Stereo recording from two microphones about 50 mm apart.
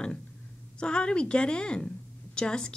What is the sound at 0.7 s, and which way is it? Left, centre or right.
A woman's voice, centre.